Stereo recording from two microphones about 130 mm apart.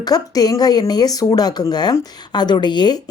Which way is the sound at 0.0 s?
30° left (ahead or behind).